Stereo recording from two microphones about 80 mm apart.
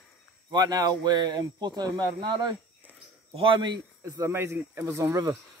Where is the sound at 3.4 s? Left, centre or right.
Right.